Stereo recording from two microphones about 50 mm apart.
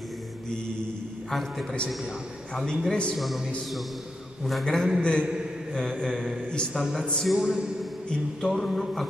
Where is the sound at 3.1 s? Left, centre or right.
Centre.